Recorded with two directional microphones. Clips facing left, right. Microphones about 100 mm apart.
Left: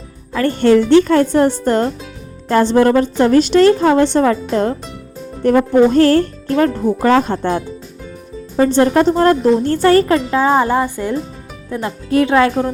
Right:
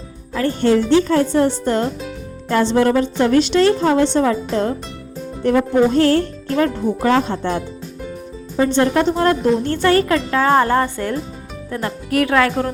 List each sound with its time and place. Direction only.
0.3 s speech: 65° left (ahead or behind)
5.4 s speech: 45° left (ahead or behind)
8.5 s speech: 35° left (ahead or behind)
10.3 s speech: 15° left (ahead or behind)